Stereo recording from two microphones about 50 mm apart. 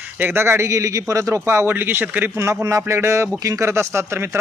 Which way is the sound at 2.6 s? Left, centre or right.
Right.